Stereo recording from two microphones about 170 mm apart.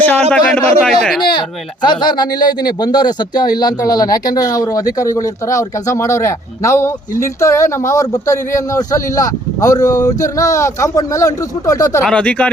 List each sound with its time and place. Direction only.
0.3 s speech: 5° left (ahead or behind)
1.4 s speech: 25° left (ahead or behind)
12.0 s speech: 5° left (ahead or behind)